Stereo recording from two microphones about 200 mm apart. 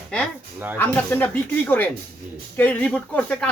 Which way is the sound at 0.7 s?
10° left (ahead or behind).